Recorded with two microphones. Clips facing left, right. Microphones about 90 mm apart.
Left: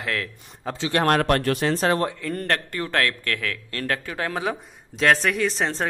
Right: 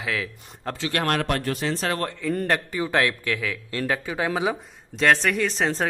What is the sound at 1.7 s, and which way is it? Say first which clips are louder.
Speech: left 5 dB; 35° left (ahead or behind).